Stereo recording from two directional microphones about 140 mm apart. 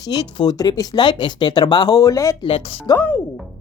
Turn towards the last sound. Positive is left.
turn(degrees=25)  # may be behind; listen again after turning